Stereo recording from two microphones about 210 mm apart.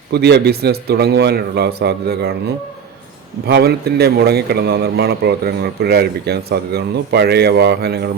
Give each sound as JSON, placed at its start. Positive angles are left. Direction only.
{"t": 0.1, "sound": "speech", "side_deg": -50}
{"t": 3.4, "sound": "speech", "side_deg": -50}